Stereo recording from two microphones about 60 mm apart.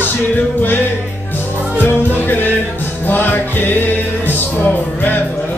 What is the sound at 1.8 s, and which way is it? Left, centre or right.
Music, left.